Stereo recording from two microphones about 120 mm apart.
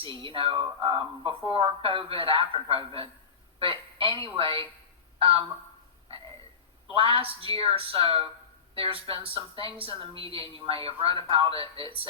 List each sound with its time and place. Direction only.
0.0 s a woman's voice: 45° right (ahead or behind)
6.1 s a sound: 50° right (ahead or behind)
6.9 s a woman's voice: 50° right (ahead or behind)